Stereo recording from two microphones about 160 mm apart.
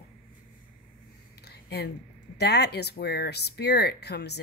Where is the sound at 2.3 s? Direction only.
90° left.